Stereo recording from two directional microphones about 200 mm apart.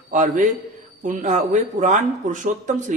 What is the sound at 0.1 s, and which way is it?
Speech, 40° right (ahead or behind).